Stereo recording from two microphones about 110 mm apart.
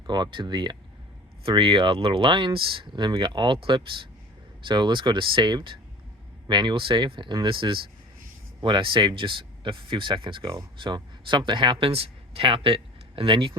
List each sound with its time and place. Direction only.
0.1 s speech: 45° right (ahead or behind)